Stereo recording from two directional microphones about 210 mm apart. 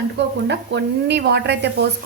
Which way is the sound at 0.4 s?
55° right (ahead or behind).